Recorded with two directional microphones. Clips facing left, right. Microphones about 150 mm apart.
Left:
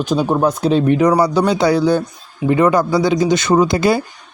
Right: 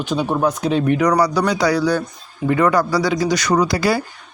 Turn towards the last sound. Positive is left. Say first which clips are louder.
# left 4 dB
turn(degrees=20)  # may be behind; listen again after turning